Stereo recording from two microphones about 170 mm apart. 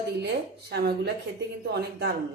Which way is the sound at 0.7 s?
70° right (ahead or behind).